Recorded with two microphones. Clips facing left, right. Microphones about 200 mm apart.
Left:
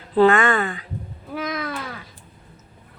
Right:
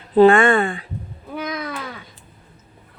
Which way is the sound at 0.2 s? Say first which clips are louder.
Right 4 dB; 30° right (ahead or behind).